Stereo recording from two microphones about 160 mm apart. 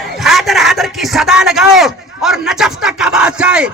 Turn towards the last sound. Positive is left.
turn(degrees=-5)  # may be behind; listen again after turning